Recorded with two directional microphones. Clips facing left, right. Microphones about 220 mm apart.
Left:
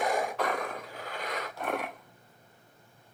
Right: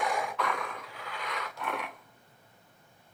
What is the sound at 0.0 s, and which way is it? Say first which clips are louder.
Roar: left 3 dB; 45° left (ahead or behind).